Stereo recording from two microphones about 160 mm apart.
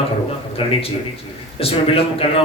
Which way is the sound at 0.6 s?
35° left (ahead or behind).